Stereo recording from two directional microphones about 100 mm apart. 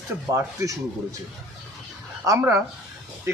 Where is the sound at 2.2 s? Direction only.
30° right (ahead or behind).